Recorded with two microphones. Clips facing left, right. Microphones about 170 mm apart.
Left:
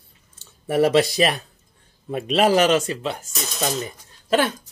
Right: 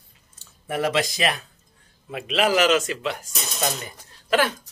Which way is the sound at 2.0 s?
40° left (ahead or behind).